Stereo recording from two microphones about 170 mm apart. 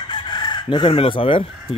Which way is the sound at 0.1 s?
25° left (ahead or behind).